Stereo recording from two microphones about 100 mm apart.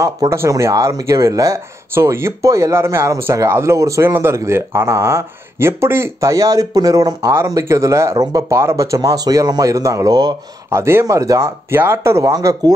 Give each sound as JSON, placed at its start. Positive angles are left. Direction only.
{"t": 0.0, "sound": "speech", "side_deg": -30}